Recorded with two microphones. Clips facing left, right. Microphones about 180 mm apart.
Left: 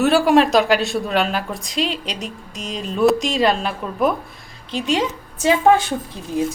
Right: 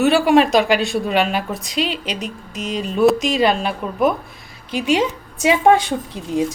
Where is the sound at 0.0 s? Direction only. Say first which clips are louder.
Right 1 dB; centre (ahead or behind).